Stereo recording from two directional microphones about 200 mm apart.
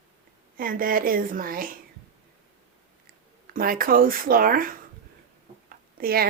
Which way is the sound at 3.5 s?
45° right (ahead or behind).